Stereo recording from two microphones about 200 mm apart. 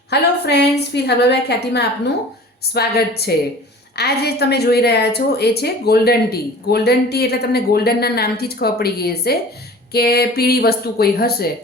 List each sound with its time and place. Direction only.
0.1 s a woman's voice: 55° left (ahead or behind)